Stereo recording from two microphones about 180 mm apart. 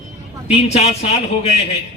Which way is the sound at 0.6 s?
35° left (ahead or behind).